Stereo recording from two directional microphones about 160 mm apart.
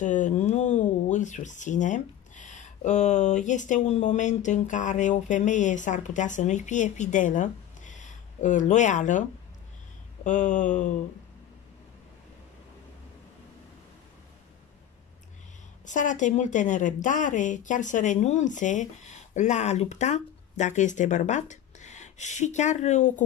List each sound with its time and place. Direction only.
0.0 s speech: 50° left (ahead or behind)
10.2 s speech: 50° left (ahead or behind)
15.8 s speech: 50° left (ahead or behind)